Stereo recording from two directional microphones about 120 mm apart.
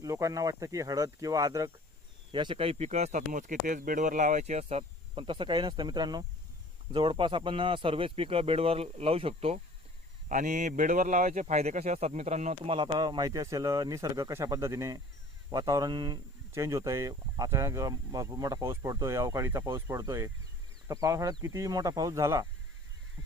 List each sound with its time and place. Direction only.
0.0 s speech: 25° right (ahead or behind)
2.3 s speech: 45° right (ahead or behind)
10.2 s speech: 90° right; by 12.5 s 75° right (ahead or behind)
12.6 s speech: 45° right (ahead or behind); by 22.4 s 25° right (ahead or behind)